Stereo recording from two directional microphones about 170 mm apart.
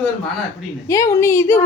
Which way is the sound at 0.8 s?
20° left (ahead or behind).